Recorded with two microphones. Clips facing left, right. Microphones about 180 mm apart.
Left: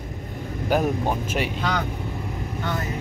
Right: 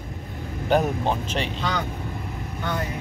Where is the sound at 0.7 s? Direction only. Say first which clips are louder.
Right 1 dB; 10° left (ahead or behind).